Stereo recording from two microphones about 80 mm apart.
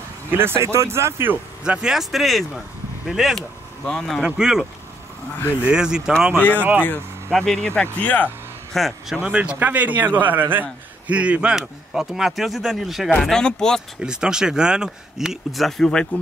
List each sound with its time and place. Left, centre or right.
0.3 s speech: right
1.6 s speech: centre
4.2 s speech: centre
5.7 s speech: centre
6.8 s speech: left
7.3 s speech: centre
7.8 s speech: centre
8.7 s speech: centre
9.2 s a man's voice: centre
13.2 s speech: centre
14.0 s speech: centre